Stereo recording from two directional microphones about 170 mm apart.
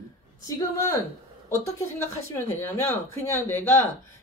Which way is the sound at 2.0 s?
15° left (ahead or behind).